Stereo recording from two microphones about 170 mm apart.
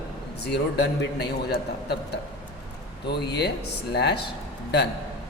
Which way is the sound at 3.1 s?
75° left (ahead or behind).